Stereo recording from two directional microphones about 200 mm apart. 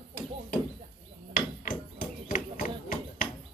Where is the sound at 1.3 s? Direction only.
45° left (ahead or behind).